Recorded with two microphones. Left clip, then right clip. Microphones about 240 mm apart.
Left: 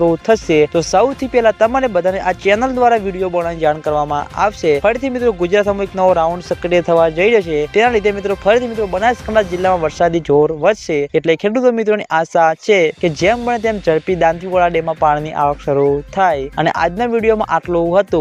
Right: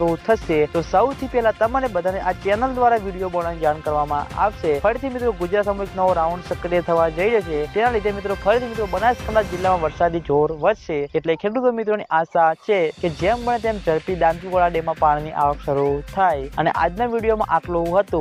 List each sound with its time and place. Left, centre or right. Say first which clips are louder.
0.0 s speech: left 6 dB; left